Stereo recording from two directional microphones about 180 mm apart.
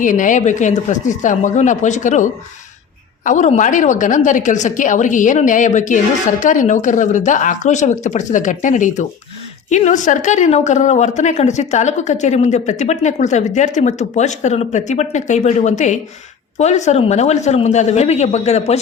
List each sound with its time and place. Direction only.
0.0 s a woman's voice: 45° left (ahead or behind)